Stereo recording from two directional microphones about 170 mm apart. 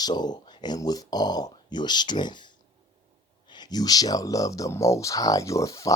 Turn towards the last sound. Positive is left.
turn(degrees=20)  # may be behind; listen again after turning